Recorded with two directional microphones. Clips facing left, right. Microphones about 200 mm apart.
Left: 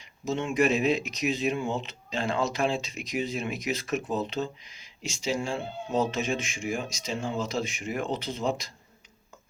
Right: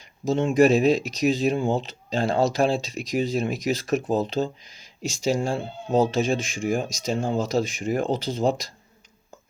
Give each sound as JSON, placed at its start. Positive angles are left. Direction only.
{"t": 0.3, "sound": "speech", "side_deg": -35}